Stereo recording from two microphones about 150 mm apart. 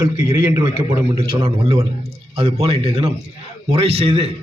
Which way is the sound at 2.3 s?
40° right (ahead or behind).